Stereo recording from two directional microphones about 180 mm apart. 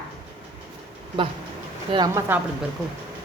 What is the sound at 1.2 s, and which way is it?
A woman's voice, 30° right (ahead or behind).